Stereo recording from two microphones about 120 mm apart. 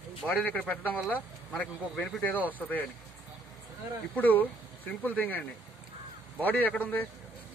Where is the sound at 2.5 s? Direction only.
15° left (ahead or behind).